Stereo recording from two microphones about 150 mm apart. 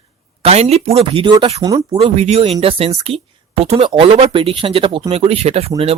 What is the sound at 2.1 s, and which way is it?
Speech, 45° right (ahead or behind).